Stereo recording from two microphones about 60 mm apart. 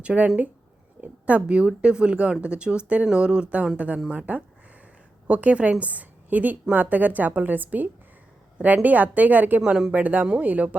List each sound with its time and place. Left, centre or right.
0.0 s a woman's voice: centre